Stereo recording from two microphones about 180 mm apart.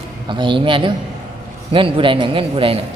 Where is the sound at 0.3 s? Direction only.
25° right (ahead or behind).